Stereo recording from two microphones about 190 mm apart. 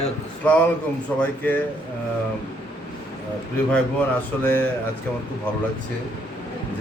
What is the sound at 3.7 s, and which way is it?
Speech, 5° left (ahead or behind).